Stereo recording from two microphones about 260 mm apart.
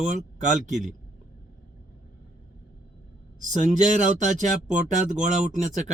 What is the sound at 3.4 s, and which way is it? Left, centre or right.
Speech, right.